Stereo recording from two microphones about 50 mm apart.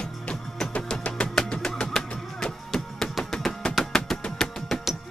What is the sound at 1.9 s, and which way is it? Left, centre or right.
Music, centre.